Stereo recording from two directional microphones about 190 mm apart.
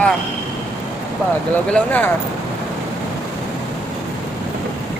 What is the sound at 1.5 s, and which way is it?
Speech, 10° left (ahead or behind).